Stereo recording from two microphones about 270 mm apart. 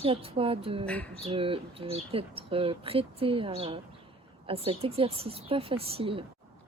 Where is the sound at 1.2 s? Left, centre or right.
Centre.